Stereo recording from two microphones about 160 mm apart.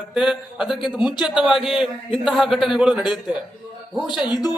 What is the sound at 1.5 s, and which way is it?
A man's voice, centre (ahead or behind).